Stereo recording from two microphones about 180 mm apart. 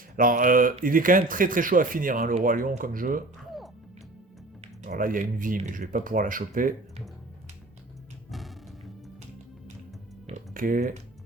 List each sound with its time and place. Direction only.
0.2 s speech: 50° right (ahead or behind)
4.9 s speech: 50° right (ahead or behind)
10.2 s typing: 45° right (ahead or behind)